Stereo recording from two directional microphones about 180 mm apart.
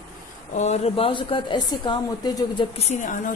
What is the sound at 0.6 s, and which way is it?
A woman's voice, 35° left (ahead or behind).